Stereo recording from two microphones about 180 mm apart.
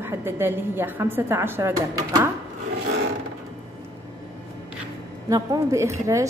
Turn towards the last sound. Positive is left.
turn(degrees=-15)  # may be behind; listen again after turning